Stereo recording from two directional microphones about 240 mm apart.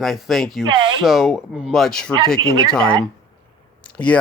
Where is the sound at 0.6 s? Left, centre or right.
Centre.